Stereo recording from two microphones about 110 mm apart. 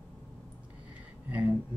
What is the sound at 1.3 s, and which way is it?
Speech, 15° right (ahead or behind).